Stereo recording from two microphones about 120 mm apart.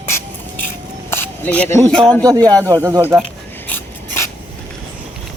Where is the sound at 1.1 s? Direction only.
15° left (ahead or behind).